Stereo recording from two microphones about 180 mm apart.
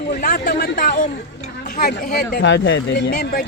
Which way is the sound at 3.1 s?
50° left (ahead or behind).